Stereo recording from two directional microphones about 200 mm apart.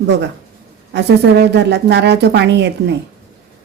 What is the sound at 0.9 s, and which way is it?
Speech, 55° right (ahead or behind).